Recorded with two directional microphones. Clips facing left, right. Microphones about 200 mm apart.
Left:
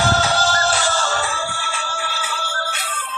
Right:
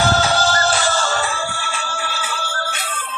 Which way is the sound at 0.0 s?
40° right (ahead or behind).